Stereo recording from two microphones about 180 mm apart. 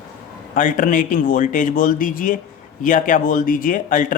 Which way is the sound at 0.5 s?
45° left (ahead or behind).